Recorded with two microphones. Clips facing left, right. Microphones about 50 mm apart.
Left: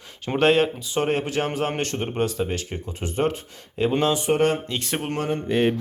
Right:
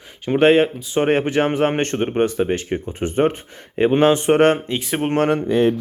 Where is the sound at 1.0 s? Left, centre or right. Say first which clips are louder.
Right 7 dB; right.